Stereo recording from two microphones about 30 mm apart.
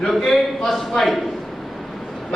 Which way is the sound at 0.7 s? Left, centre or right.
Centre.